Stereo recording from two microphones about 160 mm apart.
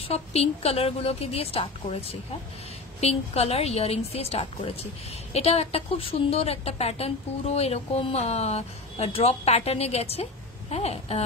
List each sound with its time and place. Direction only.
0.1 s a woman's voice: 40° left (ahead or behind)